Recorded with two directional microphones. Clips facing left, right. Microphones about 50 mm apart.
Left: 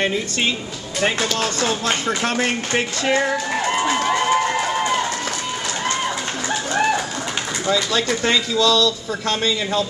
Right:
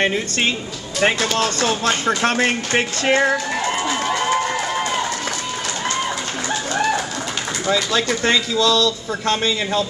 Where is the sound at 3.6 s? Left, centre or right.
Centre.